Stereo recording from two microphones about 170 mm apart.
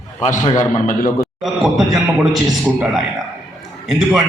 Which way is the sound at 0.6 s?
55° left (ahead or behind).